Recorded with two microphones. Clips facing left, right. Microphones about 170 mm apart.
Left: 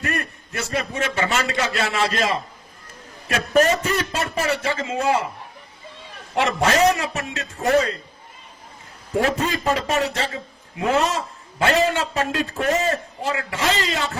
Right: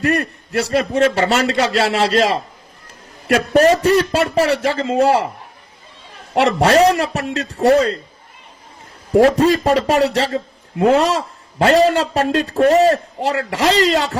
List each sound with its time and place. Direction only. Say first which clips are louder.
0.0 s a man's voice: right 9 dB; 35° right (ahead or behind)
3.5 s a man's voice: right 6 dB; 35° right (ahead or behind)
6.4 s a man's voice: right 6 dB; 35° right (ahead or behind)
9.1 s a man's voice: right 10 dB; 35° right (ahead or behind)